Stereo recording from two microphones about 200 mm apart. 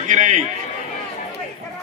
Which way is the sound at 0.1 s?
35° right (ahead or behind).